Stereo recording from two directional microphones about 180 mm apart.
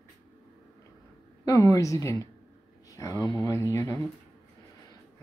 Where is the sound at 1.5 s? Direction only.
20° left (ahead or behind).